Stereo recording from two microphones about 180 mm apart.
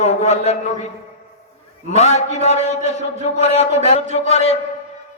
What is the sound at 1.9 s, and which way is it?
A man's voice, 40° left (ahead or behind).